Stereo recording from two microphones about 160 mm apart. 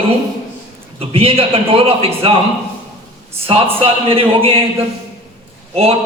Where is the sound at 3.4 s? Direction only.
35° right (ahead or behind).